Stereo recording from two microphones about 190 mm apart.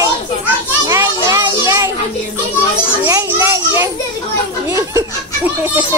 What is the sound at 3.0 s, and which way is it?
Children playing, 15° right (ahead or behind).